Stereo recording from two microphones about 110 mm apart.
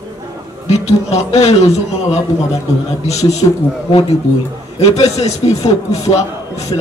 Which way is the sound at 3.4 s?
40° left (ahead or behind).